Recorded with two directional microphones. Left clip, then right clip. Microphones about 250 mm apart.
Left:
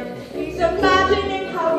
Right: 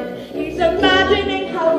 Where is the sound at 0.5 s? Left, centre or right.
Centre.